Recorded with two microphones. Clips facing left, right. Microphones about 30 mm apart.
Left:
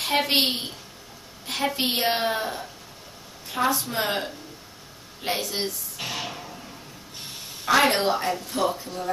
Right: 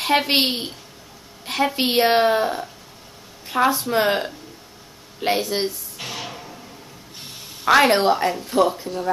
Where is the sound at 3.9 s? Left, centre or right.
Centre.